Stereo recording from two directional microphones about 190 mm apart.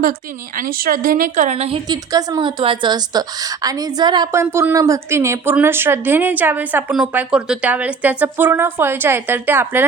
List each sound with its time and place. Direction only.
0.0 s a woman's voice: 45° right (ahead or behind); by 9.8 s 10° right (ahead or behind)